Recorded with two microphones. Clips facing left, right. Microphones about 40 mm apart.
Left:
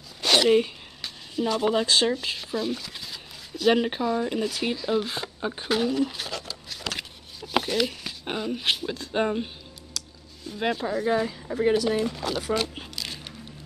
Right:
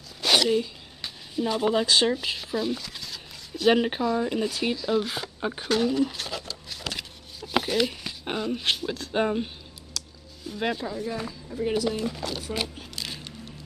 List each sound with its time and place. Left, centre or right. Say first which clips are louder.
0.2 s a sound: even; centre
1.0 s speech: left 1 dB; centre
3.5 s speech: even; centre
9.9 s music: right 1 dB; centre
10.9 s speech: left 7 dB; left
12.1 s speech: left 2 dB; centre
13.0 s a sound: right 1 dB; centre